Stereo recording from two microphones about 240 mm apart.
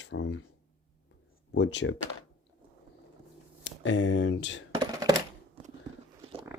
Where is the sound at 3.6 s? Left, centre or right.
Left.